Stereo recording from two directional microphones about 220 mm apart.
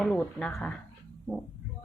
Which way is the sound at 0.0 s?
5° left (ahead or behind).